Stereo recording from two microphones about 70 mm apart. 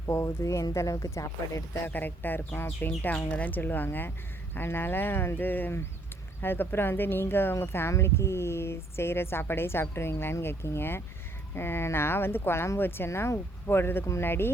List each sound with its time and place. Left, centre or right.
0.0 s speech: left
1.9 s speech: left